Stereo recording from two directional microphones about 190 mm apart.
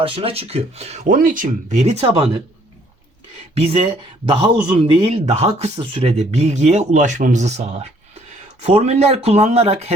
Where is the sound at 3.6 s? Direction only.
30° right (ahead or behind).